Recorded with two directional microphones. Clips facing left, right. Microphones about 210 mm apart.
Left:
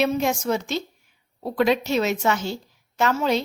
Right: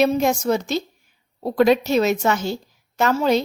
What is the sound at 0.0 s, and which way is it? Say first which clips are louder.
A woman's voice: right 4 dB; 40° right (ahead or behind).